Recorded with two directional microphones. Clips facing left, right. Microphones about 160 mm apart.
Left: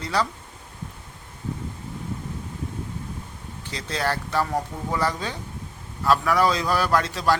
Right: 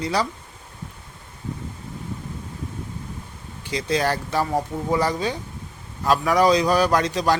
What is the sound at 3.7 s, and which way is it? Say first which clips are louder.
A man's voice: right 5 dB; 15° right (ahead or behind).